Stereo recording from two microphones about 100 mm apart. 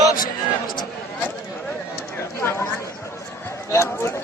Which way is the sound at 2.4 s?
25° left (ahead or behind).